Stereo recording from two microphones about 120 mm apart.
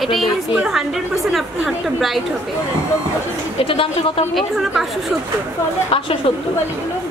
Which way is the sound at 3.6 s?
50° left (ahead or behind).